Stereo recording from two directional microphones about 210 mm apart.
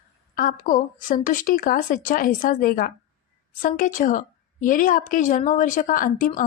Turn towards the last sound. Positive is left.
turn(degrees=40)  # may be behind; listen again after turning